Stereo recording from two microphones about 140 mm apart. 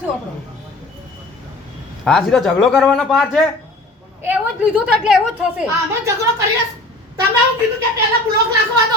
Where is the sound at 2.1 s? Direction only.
Centre (ahead or behind).